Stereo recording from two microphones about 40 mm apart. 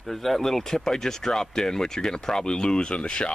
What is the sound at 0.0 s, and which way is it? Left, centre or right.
Speech, centre.